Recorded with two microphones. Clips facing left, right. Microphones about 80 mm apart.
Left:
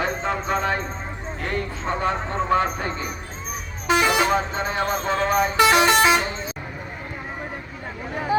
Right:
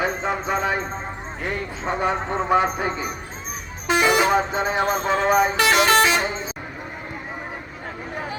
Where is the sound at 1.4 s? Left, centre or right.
Centre.